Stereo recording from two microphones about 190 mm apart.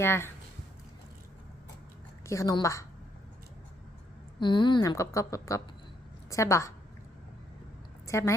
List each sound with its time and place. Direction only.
0.0 s a woman's voice: 10° left (ahead or behind)
2.2 s a woman's voice: 15° left (ahead or behind)
4.4 s a woman's voice: 25° left (ahead or behind)
8.0 s a woman's voice: 15° left (ahead or behind)